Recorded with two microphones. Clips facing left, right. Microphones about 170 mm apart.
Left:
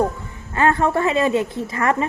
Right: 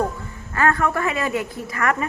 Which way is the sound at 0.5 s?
25° left (ahead or behind).